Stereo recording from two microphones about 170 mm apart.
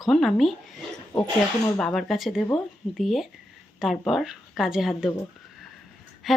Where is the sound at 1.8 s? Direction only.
Centre (ahead or behind).